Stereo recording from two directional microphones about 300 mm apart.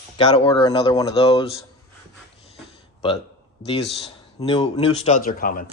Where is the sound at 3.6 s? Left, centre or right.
Centre.